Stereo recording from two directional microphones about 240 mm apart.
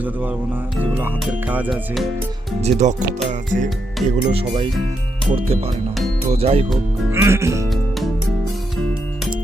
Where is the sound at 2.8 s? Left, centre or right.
Right.